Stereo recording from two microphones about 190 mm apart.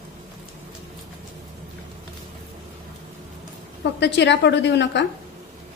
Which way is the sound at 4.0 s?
65° left (ahead or behind).